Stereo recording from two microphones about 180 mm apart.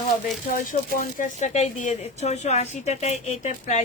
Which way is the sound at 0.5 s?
45° left (ahead or behind).